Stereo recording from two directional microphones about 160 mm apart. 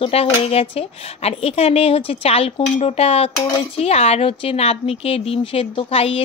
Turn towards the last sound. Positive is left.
turn(degrees=35)  # may be behind; listen again after turning